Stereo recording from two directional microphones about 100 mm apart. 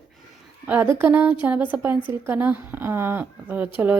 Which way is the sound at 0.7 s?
20° right (ahead or behind).